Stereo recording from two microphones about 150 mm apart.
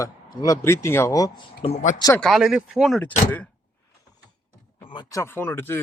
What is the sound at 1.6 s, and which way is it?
Speech, 50° left (ahead or behind).